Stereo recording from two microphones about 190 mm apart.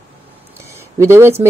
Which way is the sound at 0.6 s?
15° right (ahead or behind).